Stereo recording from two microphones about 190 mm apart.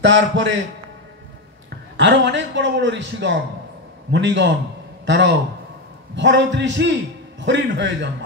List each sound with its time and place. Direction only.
0.0 s a man's voice: 70° right (ahead or behind)
2.0 s a man's voice: 70° right (ahead or behind)